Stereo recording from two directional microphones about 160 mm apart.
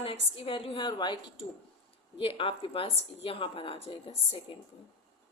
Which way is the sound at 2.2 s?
35° left (ahead or behind).